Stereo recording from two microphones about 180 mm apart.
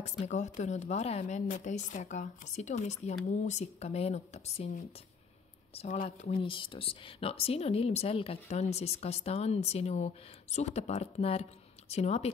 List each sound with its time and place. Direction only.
0.0 s speech: 40° left (ahead or behind)
5.8 s speech: 35° left (ahead or behind)